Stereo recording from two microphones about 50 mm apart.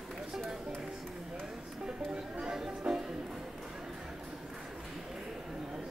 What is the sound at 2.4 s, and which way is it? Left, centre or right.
Music, centre.